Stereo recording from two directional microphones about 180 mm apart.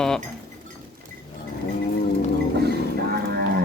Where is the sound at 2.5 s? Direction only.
65° right (ahead or behind).